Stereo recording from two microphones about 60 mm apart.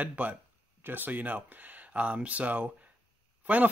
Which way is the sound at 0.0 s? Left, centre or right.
Right.